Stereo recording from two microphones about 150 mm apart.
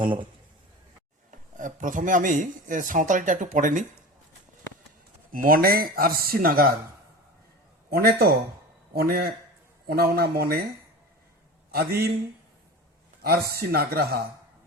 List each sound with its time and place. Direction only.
0.0 s a man's voice: 30° right (ahead or behind)
1.3 s speech: 60° right (ahead or behind)
5.3 s speech: 70° right (ahead or behind)
7.9 s speech: 90° right
11.7 s speech: 90° right
13.2 s speech: 90° right